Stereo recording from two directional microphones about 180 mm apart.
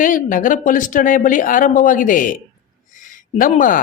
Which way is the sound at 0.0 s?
50° left (ahead or behind).